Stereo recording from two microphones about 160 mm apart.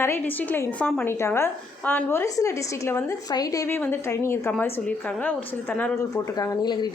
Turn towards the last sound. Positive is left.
turn(degrees=25)  # may be behind; listen again after turning